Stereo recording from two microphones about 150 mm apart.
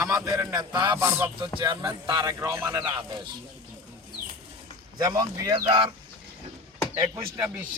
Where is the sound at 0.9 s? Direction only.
15° right (ahead or behind); by 3.1 s 30° right (ahead or behind).